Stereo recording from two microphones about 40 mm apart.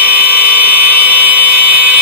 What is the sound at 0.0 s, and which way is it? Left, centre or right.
Dental drill, right.